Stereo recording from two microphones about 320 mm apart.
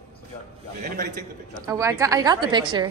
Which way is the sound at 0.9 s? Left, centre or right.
Right.